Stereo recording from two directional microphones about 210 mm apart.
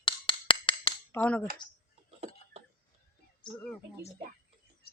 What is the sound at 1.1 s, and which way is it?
Speech, 10° left (ahead or behind).